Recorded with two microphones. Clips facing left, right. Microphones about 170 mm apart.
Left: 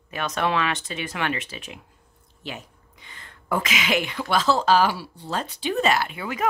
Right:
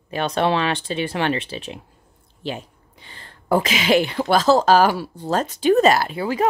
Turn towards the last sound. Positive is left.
turn(degrees=-35)  # may be behind; listen again after turning